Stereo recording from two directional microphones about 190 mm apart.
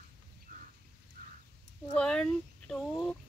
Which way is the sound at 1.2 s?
45° right (ahead or behind).